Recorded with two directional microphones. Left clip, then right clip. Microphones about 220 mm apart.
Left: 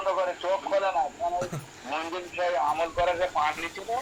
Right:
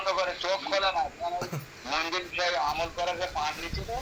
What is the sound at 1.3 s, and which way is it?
Speech, 20° left (ahead or behind).